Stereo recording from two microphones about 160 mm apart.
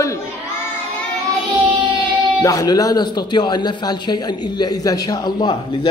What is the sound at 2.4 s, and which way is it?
A man's voice, 20° left (ahead or behind).